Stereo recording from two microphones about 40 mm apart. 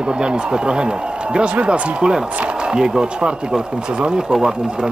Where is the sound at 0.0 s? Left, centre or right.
Right.